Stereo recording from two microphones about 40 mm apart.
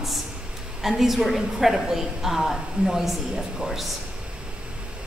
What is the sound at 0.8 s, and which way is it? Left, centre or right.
A woman's voice, centre.